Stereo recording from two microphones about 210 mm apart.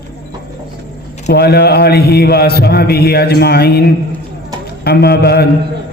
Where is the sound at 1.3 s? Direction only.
50° left (ahead or behind).